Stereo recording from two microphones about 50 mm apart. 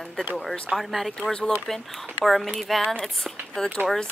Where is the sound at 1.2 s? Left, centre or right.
Centre.